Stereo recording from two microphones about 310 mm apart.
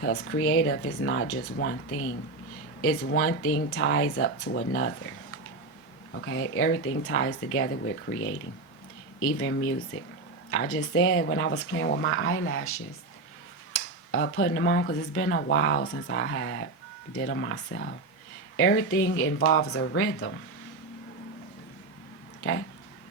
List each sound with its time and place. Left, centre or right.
0.0 s speech: left
6.1 s speech: left
22.4 s speech: left